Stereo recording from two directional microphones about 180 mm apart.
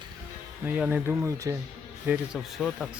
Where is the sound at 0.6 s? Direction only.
10° right (ahead or behind).